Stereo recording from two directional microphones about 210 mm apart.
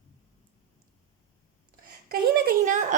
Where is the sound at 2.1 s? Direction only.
40° right (ahead or behind).